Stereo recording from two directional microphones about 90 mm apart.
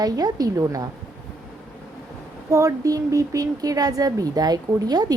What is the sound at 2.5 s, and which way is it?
Speech, 35° right (ahead or behind).